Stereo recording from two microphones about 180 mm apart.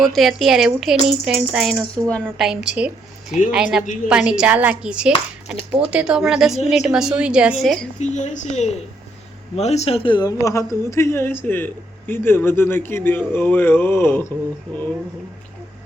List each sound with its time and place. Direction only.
0.0 s a woman's voice: centre (ahead or behind)
7.9 s a woman's voice: 40° left (ahead or behind); by 14.3 s 10° left (ahead or behind)